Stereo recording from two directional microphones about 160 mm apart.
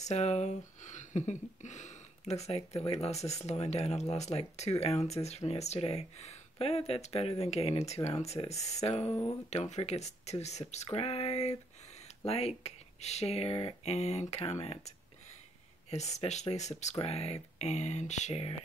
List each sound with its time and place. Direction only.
0.0 s speech: 45° left (ahead or behind)